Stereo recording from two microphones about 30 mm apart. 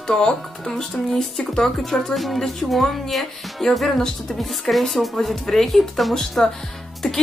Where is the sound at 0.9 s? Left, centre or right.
Centre.